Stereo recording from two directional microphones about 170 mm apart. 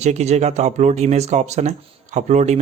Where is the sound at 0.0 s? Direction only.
40° right (ahead or behind).